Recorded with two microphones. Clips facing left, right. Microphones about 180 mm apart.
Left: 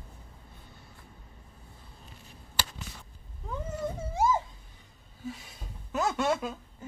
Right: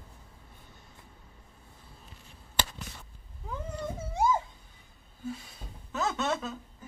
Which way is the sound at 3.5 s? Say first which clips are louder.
Left 2 dB; centre (ahead or behind).